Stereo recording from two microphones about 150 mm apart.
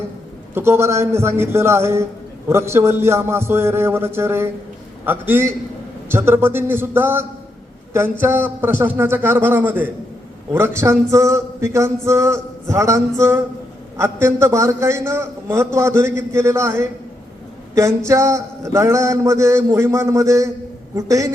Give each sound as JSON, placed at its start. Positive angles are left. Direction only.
{"t": 0.5, "sound": "a man's voice", "side_deg": -15}